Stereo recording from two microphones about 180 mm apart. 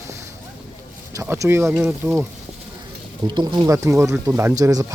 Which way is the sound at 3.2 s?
25° right (ahead or behind).